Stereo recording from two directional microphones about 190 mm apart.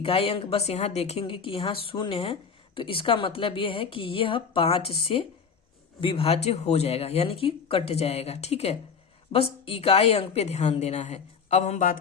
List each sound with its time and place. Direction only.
0.0 s a woman's voice: 30° left (ahead or behind)